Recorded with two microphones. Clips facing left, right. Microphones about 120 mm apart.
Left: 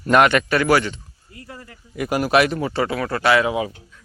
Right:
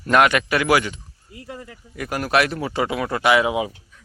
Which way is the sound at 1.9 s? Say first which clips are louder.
Left 3 dB; 10° left (ahead or behind).